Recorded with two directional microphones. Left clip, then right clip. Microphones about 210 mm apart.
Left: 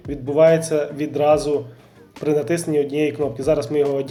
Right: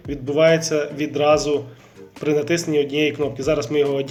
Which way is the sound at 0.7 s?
10° left (ahead or behind).